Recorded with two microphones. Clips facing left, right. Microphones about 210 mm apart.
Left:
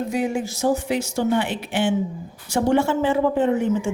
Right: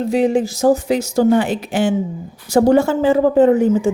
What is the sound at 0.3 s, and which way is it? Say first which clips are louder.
Speech: right 7 dB; 40° right (ahead or behind).